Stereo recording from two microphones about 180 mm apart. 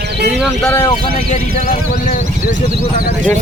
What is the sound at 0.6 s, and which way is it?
Speech, 15° left (ahead or behind).